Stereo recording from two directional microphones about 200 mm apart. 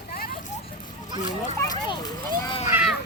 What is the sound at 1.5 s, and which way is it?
Speech, 20° left (ahead or behind).